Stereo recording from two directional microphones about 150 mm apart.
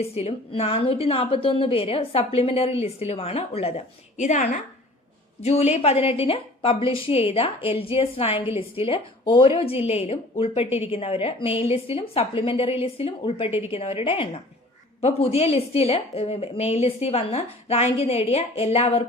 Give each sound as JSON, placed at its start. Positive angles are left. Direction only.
{"t": 0.0, "sound": "a woman's voice", "side_deg": 40}
{"t": 5.4, "sound": "a woman's voice", "side_deg": 45}